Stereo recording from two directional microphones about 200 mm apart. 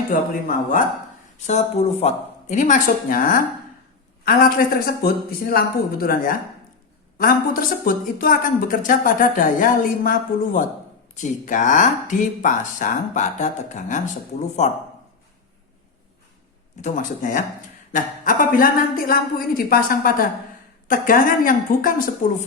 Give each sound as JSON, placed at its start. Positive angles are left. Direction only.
{"t": 0.1, "sound": "a woman's voice", "side_deg": 45}
{"t": 1.5, "sound": "a woman's voice", "side_deg": 35}
{"t": 16.8, "sound": "a woman's voice", "side_deg": 40}